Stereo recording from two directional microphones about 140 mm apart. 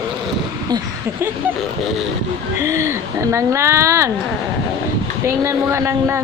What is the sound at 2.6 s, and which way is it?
A woman's voice, 20° right (ahead or behind).